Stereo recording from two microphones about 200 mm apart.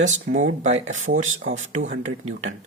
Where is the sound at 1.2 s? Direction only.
75° right (ahead or behind).